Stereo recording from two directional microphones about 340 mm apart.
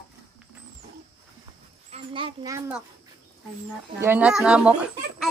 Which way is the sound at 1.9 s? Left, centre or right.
Centre.